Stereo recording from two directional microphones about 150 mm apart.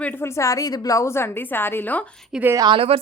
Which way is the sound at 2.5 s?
25° right (ahead or behind).